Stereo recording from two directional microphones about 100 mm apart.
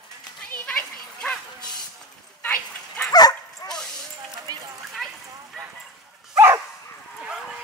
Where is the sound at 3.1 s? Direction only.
40° left (ahead or behind).